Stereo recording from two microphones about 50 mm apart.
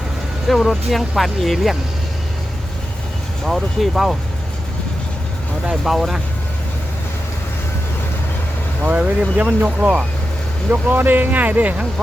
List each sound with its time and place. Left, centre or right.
0.4 s speech: centre
3.4 s speech: centre
5.8 s speech: centre
8.9 s speech: right